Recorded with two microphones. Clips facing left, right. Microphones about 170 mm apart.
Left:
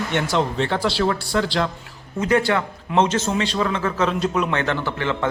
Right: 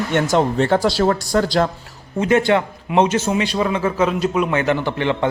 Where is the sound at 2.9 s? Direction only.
10° right (ahead or behind).